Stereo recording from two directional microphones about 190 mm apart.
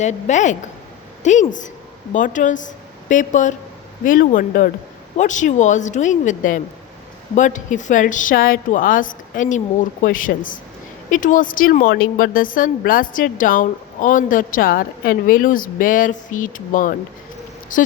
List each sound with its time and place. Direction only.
0.0 s a woman's voice: 40° left (ahead or behind)